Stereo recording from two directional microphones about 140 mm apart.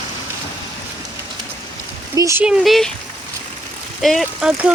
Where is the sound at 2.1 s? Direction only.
20° right (ahead or behind).